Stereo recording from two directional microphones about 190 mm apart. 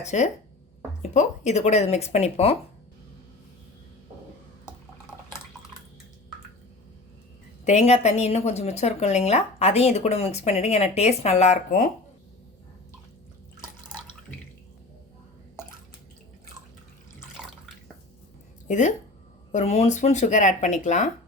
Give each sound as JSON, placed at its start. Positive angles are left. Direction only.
{"t": 0.0, "sound": "a woman's voice", "side_deg": 40}
{"t": 7.6, "sound": "a woman's voice", "side_deg": 35}
{"t": 18.7, "sound": "a woman's voice", "side_deg": 40}